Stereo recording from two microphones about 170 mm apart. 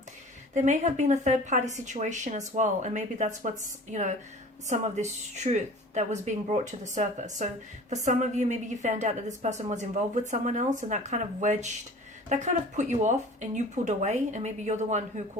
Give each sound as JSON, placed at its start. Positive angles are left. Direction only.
{"t": 0.5, "sound": "a woman's voice", "side_deg": -45}
{"t": 4.7, "sound": "a woman's voice", "side_deg": -45}